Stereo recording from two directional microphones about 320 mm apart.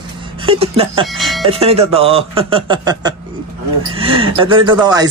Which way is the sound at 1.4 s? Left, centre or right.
Centre.